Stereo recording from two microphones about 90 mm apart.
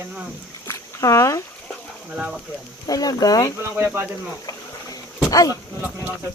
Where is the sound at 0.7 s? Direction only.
35° left (ahead or behind).